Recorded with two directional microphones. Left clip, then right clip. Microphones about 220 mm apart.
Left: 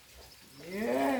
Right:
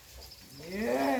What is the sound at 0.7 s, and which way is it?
Wild animals, 20° right (ahead or behind).